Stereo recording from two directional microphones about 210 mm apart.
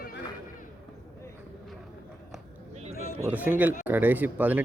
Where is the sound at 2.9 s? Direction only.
45° left (ahead or behind).